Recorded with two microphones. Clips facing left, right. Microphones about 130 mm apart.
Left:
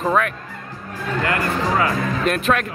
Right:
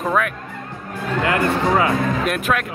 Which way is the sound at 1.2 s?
25° right (ahead or behind).